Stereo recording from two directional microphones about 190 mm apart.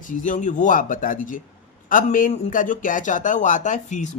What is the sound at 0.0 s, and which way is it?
Speech, 40° left (ahead or behind).